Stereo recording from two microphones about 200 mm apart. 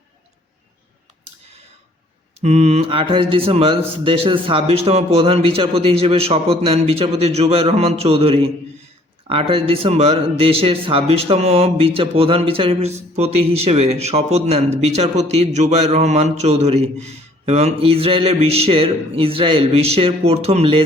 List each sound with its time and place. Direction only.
2.4 s speech: 35° right (ahead or behind)